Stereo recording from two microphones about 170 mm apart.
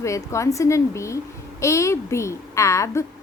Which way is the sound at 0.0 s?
15° left (ahead or behind).